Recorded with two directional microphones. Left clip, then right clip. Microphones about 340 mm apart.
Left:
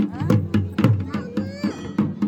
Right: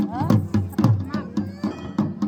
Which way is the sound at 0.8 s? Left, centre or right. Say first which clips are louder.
Even; centre.